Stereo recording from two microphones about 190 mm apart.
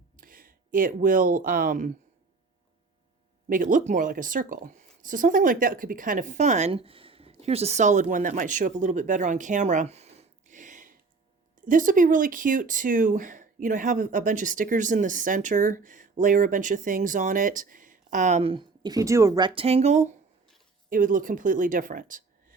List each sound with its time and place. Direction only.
0.2 s speech: 45° right (ahead or behind)
3.5 s speech: 45° right (ahead or behind)